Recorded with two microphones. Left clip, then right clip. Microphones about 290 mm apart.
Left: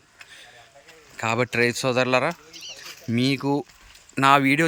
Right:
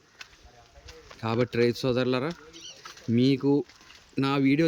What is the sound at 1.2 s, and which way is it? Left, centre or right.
Speech, centre.